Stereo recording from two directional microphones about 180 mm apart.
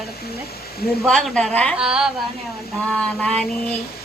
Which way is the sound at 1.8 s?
5° right (ahead or behind).